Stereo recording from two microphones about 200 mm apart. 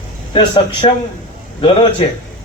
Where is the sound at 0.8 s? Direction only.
25° left (ahead or behind).